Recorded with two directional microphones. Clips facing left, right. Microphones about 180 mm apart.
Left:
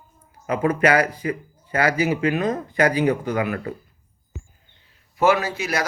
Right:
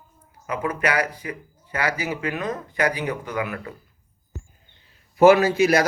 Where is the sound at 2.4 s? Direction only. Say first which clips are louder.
Left 4 dB; 40° left (ahead or behind).